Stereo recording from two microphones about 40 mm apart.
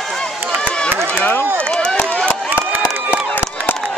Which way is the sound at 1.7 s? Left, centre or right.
Left.